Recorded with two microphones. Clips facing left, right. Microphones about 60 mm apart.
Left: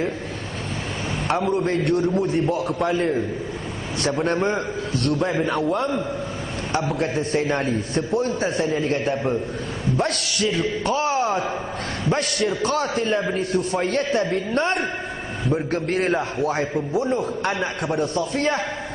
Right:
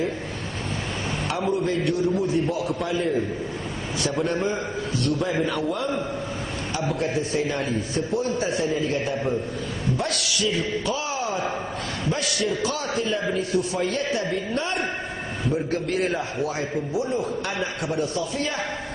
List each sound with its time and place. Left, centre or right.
1.6 s a man's voice: left
4.2 s a man's voice: left
7.0 s a man's voice: left
9.9 s a man's voice: left
10.9 s a sound: left
12.1 s a man's voice: left